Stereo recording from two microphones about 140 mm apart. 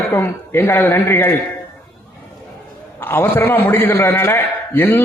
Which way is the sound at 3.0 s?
15° left (ahead or behind).